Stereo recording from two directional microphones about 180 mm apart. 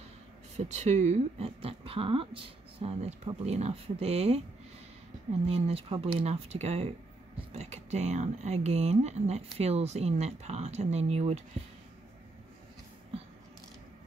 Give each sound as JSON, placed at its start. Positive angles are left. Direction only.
{"t": 0.6, "sound": "speech", "side_deg": -40}
{"t": 5.5, "sound": "speech", "side_deg": -35}